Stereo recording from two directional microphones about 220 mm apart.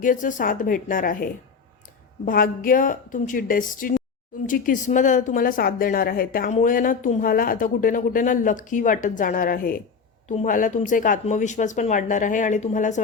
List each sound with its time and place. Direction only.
0.0 s speech: 35° left (ahead or behind)